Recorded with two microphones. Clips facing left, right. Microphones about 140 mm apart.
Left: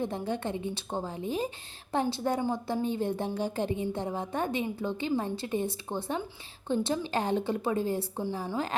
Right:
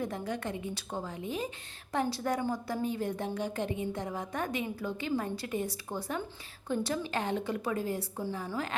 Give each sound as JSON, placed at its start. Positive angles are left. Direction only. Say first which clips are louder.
{"t": 0.0, "sound": "a woman's voice", "louder": "left 3 dB", "side_deg": 25}